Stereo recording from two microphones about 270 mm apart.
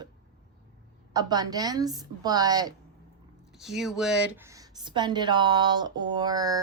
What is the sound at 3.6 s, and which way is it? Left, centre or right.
Speech, centre.